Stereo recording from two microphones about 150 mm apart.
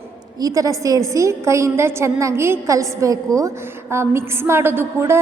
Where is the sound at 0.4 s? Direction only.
20° right (ahead or behind).